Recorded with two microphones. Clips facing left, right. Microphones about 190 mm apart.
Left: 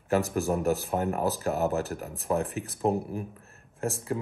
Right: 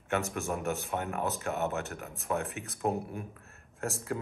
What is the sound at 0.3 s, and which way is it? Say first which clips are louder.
Speech: left 7 dB; 35° left (ahead or behind).